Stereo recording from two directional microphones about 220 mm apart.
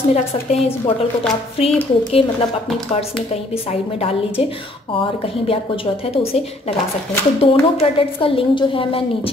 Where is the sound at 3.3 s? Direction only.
25° left (ahead or behind).